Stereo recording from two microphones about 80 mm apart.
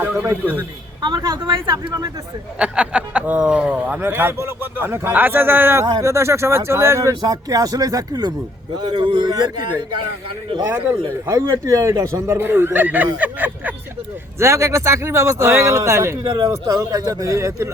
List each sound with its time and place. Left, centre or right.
0.0 s speech: right
1.0 s speech: right
2.6 s speech: centre; by 7.1 s right
7.2 s speech: right
8.8 s speech: right
11.3 s speech: right
14.3 s speech: right